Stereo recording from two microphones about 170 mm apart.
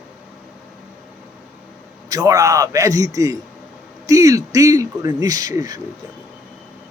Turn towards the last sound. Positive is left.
turn(degrees=-20)  # may be behind; listen again after turning